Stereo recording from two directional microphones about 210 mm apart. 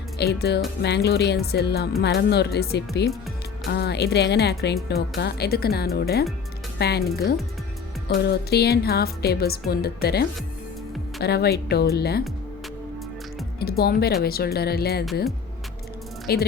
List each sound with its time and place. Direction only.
0.2 s speech: 50° left (ahead or behind)
8.0 s speech: 50° left (ahead or behind)
13.6 s speech: 45° left (ahead or behind)
16.3 s speech: 50° left (ahead or behind)